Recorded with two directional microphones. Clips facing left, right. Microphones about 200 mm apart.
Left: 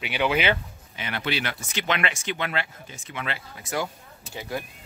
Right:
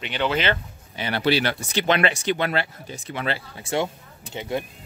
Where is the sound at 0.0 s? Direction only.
10° left (ahead or behind).